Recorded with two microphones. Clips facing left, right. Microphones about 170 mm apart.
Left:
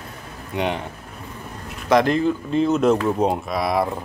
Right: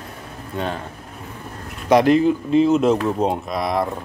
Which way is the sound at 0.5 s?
15° left (ahead or behind).